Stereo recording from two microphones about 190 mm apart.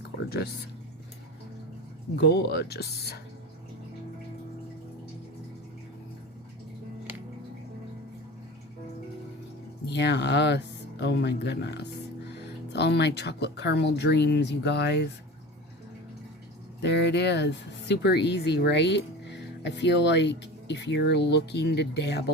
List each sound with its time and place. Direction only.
2.1 s speech: 60° left (ahead or behind)
9.8 s speech: 65° left (ahead or behind)
16.8 s speech: 65° left (ahead or behind)